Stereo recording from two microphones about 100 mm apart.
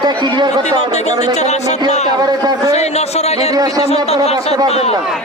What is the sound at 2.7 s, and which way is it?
Speech, 90° left.